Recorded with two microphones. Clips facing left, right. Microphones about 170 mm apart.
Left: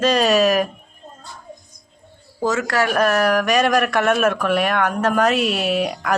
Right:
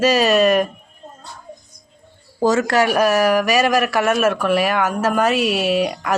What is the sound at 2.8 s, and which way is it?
Speech, 10° right (ahead or behind).